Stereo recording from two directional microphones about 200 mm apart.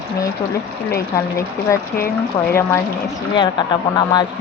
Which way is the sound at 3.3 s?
20° left (ahead or behind).